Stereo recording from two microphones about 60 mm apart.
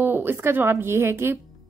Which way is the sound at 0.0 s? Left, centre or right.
Right.